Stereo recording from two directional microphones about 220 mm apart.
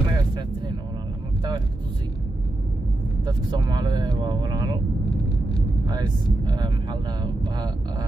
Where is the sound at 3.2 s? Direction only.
20° right (ahead or behind).